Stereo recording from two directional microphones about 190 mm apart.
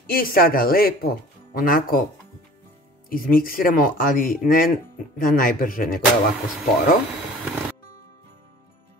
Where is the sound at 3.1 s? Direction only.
50° left (ahead or behind).